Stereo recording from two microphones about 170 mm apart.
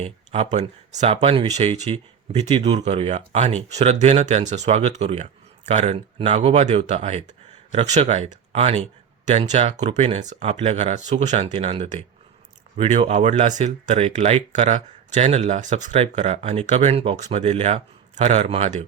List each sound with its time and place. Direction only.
0.0 s speech: 40° right (ahead or behind)